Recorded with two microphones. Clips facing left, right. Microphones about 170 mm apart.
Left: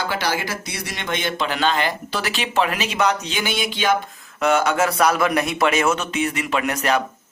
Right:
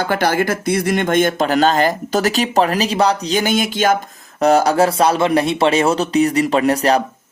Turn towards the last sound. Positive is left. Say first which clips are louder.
# right 6 dB
turn(degrees=-35)  # may be behind; listen again after turning